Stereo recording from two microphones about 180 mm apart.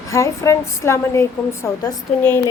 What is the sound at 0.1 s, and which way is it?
A woman's voice, 15° left (ahead or behind).